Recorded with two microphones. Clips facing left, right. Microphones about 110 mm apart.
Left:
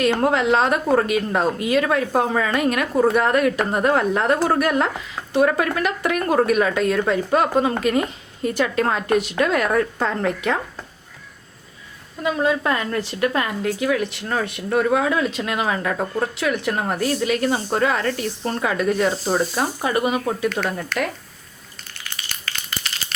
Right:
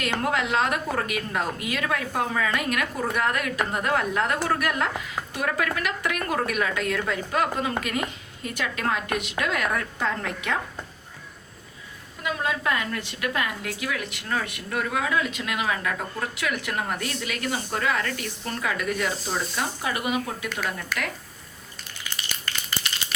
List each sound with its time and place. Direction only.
0.2 s a woman's voice: 30° left (ahead or behind)
12.2 s a woman's voice: 30° left (ahead or behind)
20.9 s speech: 5° right (ahead or behind)